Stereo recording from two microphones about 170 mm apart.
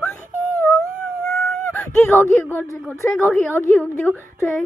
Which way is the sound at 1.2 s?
5° left (ahead or behind).